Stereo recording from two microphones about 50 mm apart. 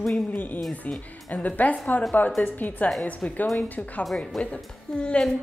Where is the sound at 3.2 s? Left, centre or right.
Left.